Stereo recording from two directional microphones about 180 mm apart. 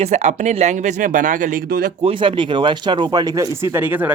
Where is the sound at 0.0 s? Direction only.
40° right (ahead or behind).